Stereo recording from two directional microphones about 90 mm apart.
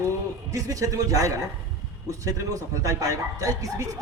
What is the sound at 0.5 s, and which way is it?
Speech, 40° right (ahead or behind).